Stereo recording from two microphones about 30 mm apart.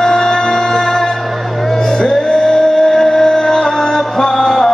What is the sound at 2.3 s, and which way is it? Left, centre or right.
Music, centre.